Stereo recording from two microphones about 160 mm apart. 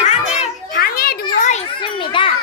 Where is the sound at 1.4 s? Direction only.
45° left (ahead or behind).